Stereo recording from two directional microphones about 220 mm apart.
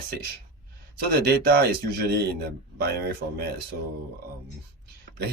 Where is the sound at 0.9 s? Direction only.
45° right (ahead or behind).